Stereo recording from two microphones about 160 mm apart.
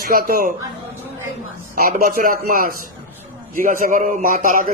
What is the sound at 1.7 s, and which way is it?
A man's voice, 65° right (ahead or behind).